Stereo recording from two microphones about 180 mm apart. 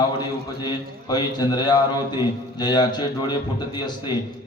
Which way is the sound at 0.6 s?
25° left (ahead or behind).